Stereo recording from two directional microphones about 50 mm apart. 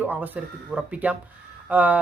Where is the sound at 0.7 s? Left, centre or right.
Right.